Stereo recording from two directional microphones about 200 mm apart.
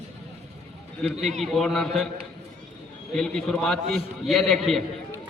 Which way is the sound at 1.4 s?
Centre (ahead or behind).